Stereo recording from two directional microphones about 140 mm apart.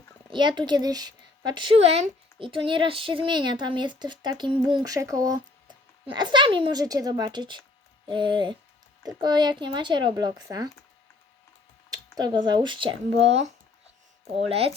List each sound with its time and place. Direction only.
0.3 s speech: 35° right (ahead or behind)
1.8 s a woman's voice: 45° right (ahead or behind); by 10.7 s 30° right (ahead or behind)
11.9 s a woman's voice: 30° right (ahead or behind)